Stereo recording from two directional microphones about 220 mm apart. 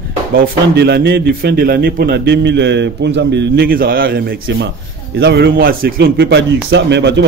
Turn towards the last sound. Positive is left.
turn(degrees=-50)  # may be behind; listen again after turning